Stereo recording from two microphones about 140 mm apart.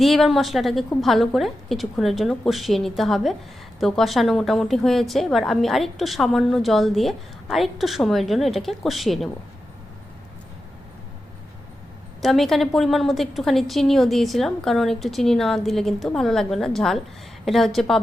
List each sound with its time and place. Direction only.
0.0 s a woman's voice: centre (ahead or behind)
12.2 s a woman's voice: centre (ahead or behind)